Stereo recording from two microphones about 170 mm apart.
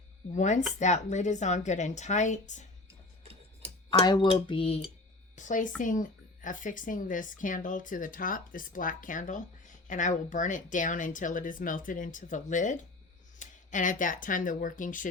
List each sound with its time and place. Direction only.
0.3 s speech: 45° left (ahead or behind)
4.0 s a sound: 25° left (ahead or behind)
5.4 s speech: 50° left (ahead or behind)